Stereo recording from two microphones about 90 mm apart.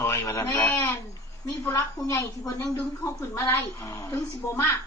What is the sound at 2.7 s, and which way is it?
A woman's voice, 25° left (ahead or behind).